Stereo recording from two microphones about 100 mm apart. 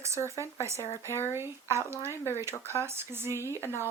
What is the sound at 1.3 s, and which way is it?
Speech, 25° right (ahead or behind).